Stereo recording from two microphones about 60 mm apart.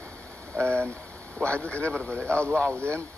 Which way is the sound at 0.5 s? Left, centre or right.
Right.